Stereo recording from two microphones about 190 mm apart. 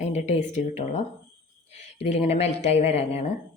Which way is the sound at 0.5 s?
35° left (ahead or behind).